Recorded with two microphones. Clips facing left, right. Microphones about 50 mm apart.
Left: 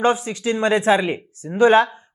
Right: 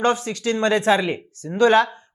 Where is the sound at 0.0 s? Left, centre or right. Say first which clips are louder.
Left 1 dB; centre.